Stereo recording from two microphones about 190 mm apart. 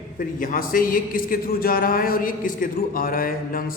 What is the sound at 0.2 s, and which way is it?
A man's voice, 45° left (ahead or behind).